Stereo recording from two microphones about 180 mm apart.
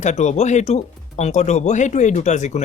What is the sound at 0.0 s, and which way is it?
Speech, 40° left (ahead or behind).